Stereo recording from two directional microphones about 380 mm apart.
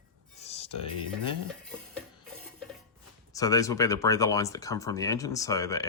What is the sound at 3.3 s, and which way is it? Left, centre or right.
Speech, centre.